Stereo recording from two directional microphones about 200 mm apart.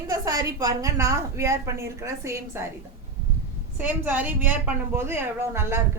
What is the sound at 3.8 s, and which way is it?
A woman's voice, 10° right (ahead or behind).